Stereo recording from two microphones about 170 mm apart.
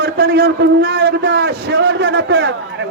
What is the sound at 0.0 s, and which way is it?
A man's voice, 70° right (ahead or behind).